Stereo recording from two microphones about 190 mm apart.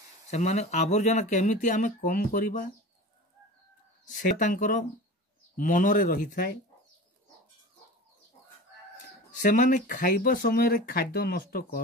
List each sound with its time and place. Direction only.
0.3 s speech: 35° left (ahead or behind)
4.1 s speech: 45° left (ahead or behind)
9.4 s speech: 45° left (ahead or behind)